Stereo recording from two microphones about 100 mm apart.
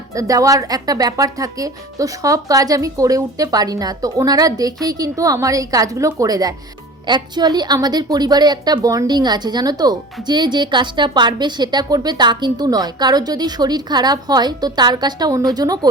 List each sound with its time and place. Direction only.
0.1 s a woman's voice: 35° right (ahead or behind)